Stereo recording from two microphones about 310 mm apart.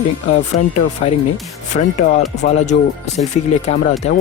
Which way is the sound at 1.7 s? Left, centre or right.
Left.